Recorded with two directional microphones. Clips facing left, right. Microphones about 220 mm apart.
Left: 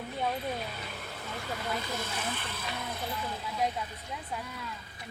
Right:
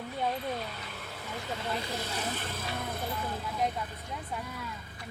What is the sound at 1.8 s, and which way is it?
Speech, 35° right (ahead or behind).